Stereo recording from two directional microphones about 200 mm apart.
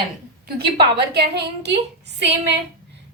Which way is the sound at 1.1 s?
55° right (ahead or behind).